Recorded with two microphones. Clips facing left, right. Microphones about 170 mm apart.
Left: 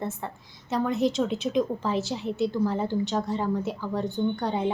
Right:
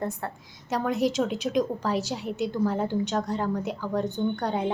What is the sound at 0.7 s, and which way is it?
Speech, centre (ahead or behind).